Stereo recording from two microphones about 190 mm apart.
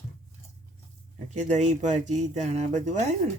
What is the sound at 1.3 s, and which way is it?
Speech, 40° right (ahead or behind).